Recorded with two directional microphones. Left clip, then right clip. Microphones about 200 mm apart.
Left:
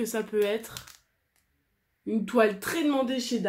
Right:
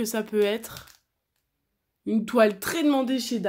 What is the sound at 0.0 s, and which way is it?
Speech, 45° right (ahead or behind).